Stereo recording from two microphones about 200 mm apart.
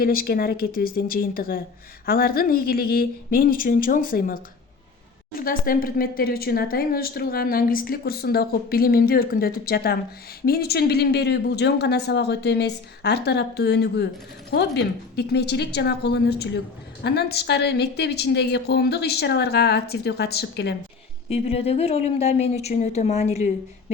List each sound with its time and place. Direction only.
0.0 s a woman's voice: 45° left (ahead or behind)
21.2 s a woman's voice: 30° left (ahead or behind)